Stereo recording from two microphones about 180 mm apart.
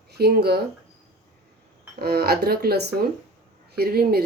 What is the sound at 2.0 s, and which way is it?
Speech, 65° right (ahead or behind).